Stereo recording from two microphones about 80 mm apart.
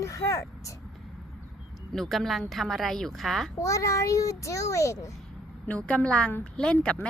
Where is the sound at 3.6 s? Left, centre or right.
Left.